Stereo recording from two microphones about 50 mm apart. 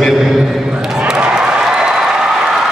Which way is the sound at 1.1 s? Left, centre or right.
Centre.